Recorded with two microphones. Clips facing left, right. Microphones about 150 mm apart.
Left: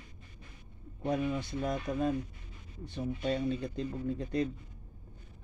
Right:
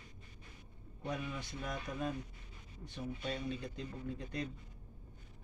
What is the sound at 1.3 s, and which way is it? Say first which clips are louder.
Speech: left 9 dB; 30° left (ahead or behind).